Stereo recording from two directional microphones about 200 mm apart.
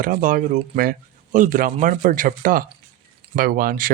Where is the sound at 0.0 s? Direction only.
40° right (ahead or behind).